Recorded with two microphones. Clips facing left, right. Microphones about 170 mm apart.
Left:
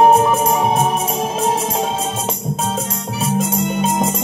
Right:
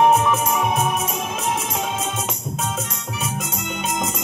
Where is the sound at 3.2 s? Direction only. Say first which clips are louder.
Left 11 dB; 30° left (ahead or behind).